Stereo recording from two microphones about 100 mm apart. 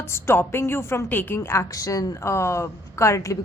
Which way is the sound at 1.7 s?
35° left (ahead or behind).